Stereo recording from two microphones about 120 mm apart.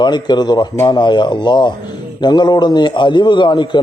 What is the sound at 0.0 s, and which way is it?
A man's voice, 35° left (ahead or behind).